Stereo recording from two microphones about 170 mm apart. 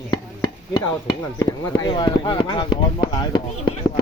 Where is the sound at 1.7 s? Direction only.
25° left (ahead or behind).